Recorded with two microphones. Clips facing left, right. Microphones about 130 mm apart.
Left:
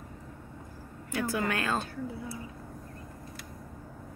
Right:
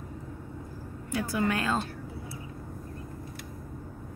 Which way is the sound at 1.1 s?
15° right (ahead or behind).